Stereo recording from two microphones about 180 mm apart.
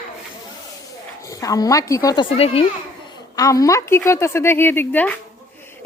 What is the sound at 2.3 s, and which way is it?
Speech, 35° left (ahead or behind).